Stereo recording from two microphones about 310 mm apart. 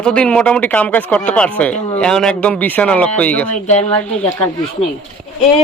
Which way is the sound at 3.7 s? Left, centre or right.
Left.